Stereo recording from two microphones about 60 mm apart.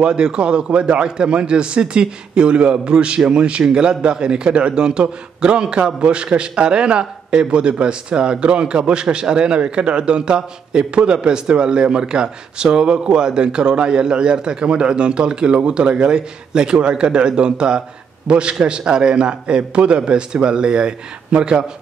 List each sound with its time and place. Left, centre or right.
0.0 s a man's voice: centre